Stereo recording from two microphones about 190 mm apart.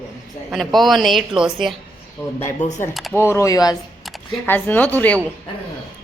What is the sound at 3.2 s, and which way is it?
A woman's voice, 15° left (ahead or behind).